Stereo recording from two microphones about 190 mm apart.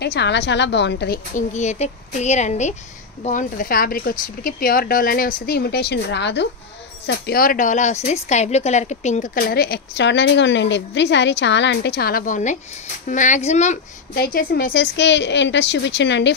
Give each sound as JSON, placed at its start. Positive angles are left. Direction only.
{"t": 0.0, "sound": "a woman's voice", "side_deg": 65}
{"t": 7.1, "sound": "a woman's voice", "side_deg": 55}
{"t": 14.1, "sound": "a woman's voice", "side_deg": 55}